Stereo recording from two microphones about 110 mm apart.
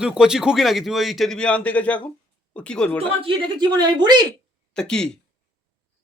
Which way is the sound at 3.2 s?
45° right (ahead or behind).